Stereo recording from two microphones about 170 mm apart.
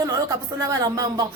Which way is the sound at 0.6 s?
20° right (ahead or behind).